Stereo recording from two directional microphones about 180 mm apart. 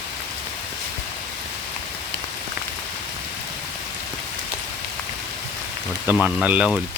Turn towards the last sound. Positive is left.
turn(degrees=-5)  # may be behind; listen again after turning